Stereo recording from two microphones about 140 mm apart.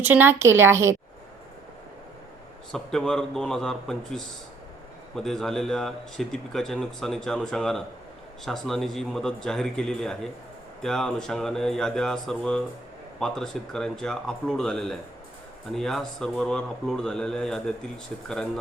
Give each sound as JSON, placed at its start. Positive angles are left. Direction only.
{"t": 0.0, "sound": "speech", "side_deg": -15}
{"t": 2.7, "sound": "speech", "side_deg": 5}